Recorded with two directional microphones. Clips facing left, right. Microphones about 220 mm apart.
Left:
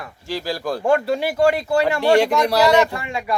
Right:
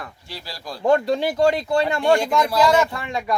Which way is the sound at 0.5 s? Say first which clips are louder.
Left 10 dB; 55° left (ahead or behind).